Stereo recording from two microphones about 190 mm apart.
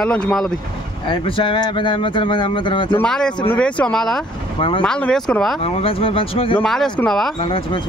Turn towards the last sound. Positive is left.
turn(degrees=30)  # may be behind; listen again after turning